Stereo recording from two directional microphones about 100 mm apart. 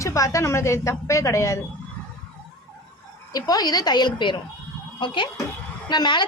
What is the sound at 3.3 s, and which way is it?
A woman's voice, 40° left (ahead or behind).